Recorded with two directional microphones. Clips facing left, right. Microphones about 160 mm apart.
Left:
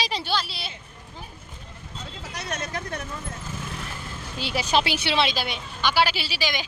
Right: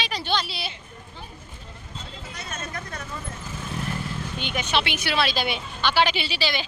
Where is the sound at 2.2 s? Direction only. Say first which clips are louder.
Left 5 dB; 75° left (ahead or behind).